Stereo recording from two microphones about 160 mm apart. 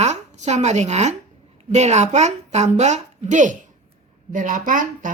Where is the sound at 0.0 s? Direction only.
45° right (ahead or behind).